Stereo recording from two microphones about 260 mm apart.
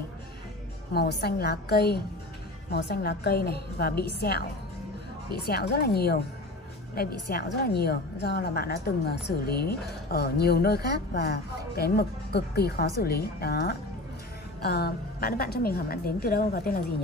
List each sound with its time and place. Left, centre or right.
0.9 s speech: left
5.5 s speech: left